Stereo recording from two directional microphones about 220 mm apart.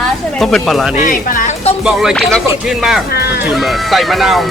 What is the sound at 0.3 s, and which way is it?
Speech, centre (ahead or behind).